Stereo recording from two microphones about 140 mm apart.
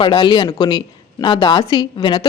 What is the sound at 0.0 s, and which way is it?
A woman's voice, 35° left (ahead or behind).